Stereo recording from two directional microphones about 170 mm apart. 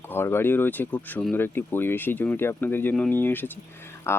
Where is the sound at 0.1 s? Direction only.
15° left (ahead or behind).